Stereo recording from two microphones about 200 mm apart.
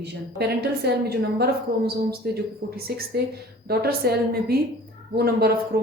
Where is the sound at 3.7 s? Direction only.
50° right (ahead or behind).